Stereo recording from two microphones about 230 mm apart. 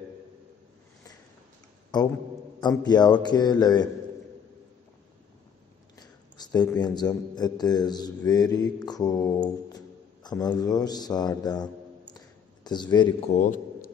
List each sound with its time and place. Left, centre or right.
2.6 s a man's voice: centre
5.9 s a man's voice: centre
13.3 s a man's voice: left